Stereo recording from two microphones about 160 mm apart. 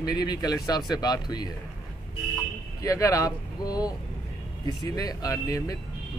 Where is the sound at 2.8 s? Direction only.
20° left (ahead or behind).